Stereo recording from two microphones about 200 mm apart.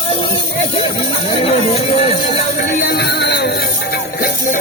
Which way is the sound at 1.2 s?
25° left (ahead or behind).